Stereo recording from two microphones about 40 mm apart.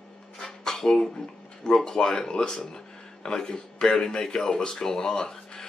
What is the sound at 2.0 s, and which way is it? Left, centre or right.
A man's voice, centre.